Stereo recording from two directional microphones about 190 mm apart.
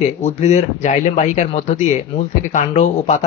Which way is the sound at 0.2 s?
35° left (ahead or behind).